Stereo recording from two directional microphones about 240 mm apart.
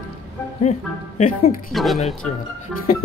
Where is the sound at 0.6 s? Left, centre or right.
Left.